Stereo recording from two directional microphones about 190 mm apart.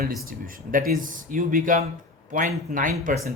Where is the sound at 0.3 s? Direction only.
50° right (ahead or behind).